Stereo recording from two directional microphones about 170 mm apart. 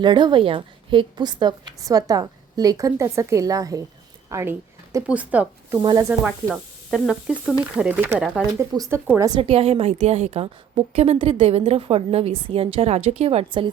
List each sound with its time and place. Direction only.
0.0 s a woman's voice: 25° right (ahead or behind)
4.3 s a sound: 15° right (ahead or behind)
5.0 s speech: 10° right (ahead or behind)
5.8 s a woman's voice: 25° right (ahead or behind)
6.1 s speech: 5° right (ahead or behind); by 9.4 s 20° right (ahead or behind)
9.4 s a woman's voice: 35° right (ahead or behind)